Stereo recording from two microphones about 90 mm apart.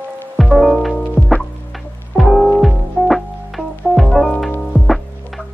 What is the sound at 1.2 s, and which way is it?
Music, 10° left (ahead or behind).